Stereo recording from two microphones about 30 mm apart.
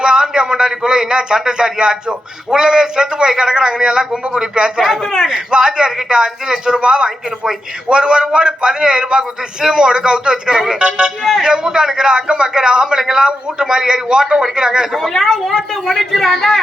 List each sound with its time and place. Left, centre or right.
0.0 s a man's voice: right
10.8 s a man's voice: right
14.9 s a man's voice: centre